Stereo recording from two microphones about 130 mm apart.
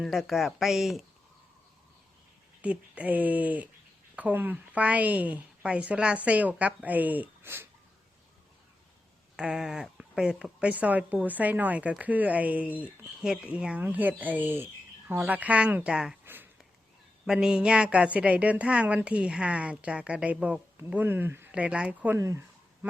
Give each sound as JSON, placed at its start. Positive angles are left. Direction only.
{"t": 0.0, "sound": "speech", "side_deg": 0}
{"t": 2.6, "sound": "speech", "side_deg": -10}
{"t": 9.3, "sound": "speech", "side_deg": -5}
{"t": 16.2, "sound": "a sound", "side_deg": -15}
{"t": 17.2, "sound": "speech", "side_deg": -5}